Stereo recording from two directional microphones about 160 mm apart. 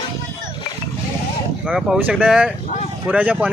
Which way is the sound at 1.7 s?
5° right (ahead or behind).